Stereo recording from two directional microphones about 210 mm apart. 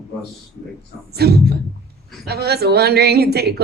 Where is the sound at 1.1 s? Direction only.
50° right (ahead or behind).